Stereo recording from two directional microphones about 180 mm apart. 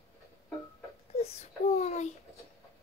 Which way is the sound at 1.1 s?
35° left (ahead or behind).